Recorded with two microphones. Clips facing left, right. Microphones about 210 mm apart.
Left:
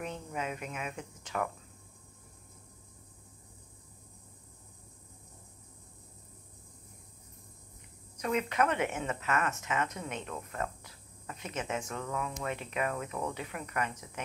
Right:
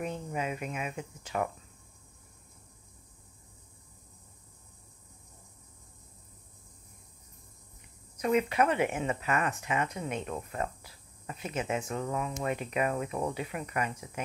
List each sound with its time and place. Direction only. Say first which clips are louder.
0.0 s speech: right 3 dB; 10° right (ahead or behind)
8.2 s speech: right 4 dB; 10° right (ahead or behind)